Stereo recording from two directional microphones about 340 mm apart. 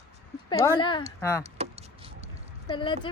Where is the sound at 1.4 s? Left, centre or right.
Centre.